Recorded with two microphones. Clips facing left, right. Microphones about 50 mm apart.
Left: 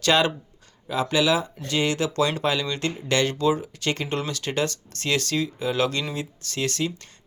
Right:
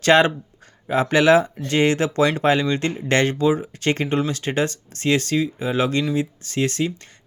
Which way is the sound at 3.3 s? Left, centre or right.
Right.